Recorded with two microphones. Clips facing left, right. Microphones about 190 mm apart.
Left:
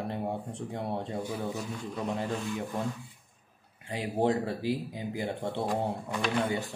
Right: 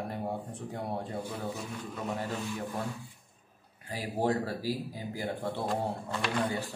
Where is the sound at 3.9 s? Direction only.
25° left (ahead or behind).